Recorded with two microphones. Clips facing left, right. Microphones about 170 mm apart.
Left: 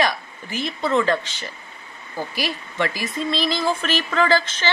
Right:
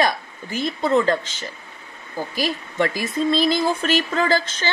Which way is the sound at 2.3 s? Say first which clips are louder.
Right 4 dB; 45° right (ahead or behind).